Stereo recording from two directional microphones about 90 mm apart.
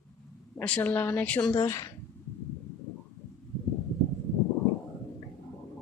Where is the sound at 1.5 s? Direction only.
35° left (ahead or behind).